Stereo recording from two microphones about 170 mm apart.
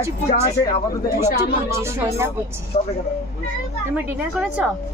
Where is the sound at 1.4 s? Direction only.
15° right (ahead or behind).